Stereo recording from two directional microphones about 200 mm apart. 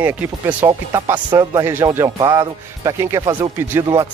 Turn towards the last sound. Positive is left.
turn(degrees=-15)  # may be behind; listen again after turning